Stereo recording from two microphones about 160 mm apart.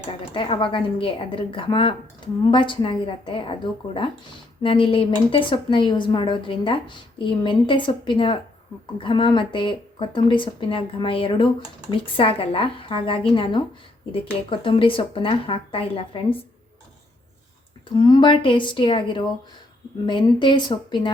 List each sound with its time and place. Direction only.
0.3 s speech: 30° left (ahead or behind)
17.8 s a woman's voice: 30° left (ahead or behind)